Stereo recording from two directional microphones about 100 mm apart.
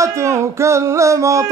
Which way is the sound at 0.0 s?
30° right (ahead or behind).